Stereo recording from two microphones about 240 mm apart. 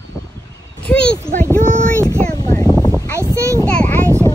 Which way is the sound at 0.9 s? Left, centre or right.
Centre.